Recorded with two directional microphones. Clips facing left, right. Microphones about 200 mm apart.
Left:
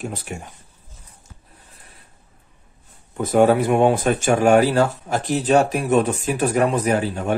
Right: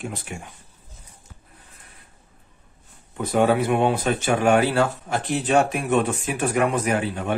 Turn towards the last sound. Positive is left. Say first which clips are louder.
# left 3 dB
turn(degrees=40)  # may be behind; listen again after turning